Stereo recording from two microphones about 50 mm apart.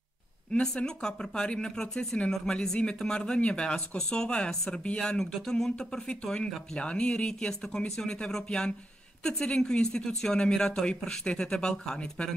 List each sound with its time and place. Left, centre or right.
0.5 s speech: centre